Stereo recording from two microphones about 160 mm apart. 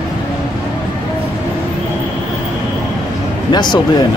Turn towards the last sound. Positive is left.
turn(degrees=25)  # may be behind; listen again after turning